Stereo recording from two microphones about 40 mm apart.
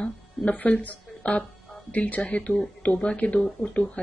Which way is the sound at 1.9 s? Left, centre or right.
Left.